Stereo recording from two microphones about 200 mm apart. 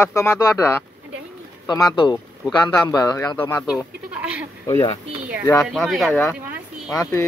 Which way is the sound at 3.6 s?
5° right (ahead or behind).